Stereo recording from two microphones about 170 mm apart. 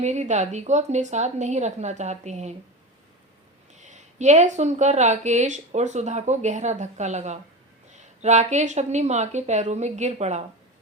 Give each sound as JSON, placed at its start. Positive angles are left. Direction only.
{"t": 0.0, "sound": "speech", "side_deg": -40}
{"t": 3.8, "sound": "speech", "side_deg": -45}